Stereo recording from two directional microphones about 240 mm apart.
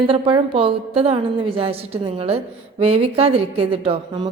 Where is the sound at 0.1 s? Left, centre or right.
Right.